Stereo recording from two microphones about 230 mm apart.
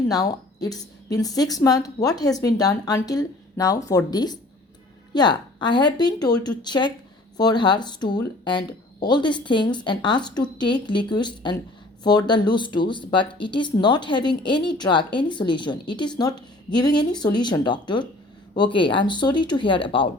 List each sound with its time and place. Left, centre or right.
0.1 s a woman's voice: centre